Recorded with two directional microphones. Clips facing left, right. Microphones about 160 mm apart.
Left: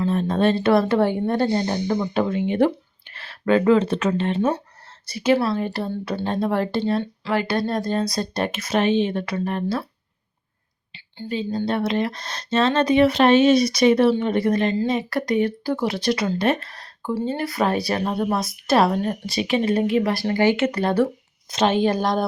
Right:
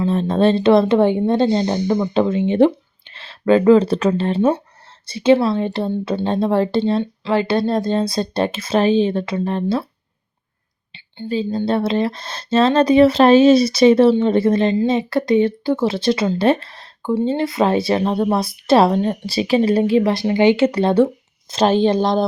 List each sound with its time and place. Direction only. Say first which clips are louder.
0.0 s speech: right 4 dB; 30° right (ahead or behind)
10.9 s speech: right 5 dB; 30° right (ahead or behind)
20.6 s a woman's voice: right 5 dB; 30° right (ahead or behind)